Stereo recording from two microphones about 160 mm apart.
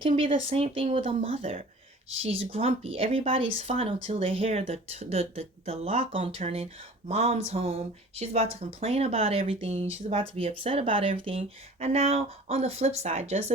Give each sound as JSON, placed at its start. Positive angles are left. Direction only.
{"t": 0.3, "sound": "speech", "side_deg": -40}